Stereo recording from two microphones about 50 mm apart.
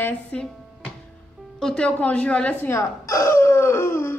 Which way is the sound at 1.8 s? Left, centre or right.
Left.